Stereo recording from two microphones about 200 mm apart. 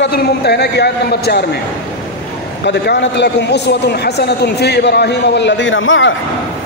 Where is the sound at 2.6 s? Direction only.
60° left (ahead or behind).